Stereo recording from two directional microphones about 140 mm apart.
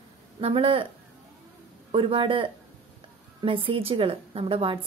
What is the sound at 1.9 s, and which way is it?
A woman's voice, 40° right (ahead or behind).